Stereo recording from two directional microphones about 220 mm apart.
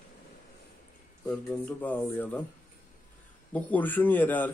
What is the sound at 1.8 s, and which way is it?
Speech, 5° left (ahead or behind).